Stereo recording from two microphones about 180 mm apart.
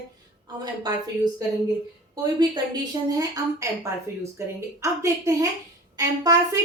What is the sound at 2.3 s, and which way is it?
Speech, 25° right (ahead or behind).